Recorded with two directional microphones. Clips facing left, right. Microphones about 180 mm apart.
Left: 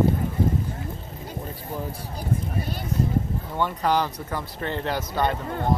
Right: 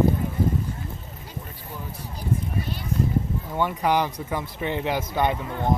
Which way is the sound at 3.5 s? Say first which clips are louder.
Right 1 dB; 10° right (ahead or behind).